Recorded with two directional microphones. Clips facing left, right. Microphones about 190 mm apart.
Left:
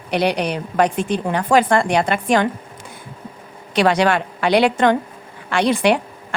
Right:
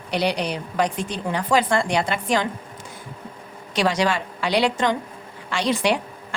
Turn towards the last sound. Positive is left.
turn(degrees=60)  # may be behind; listen again after turning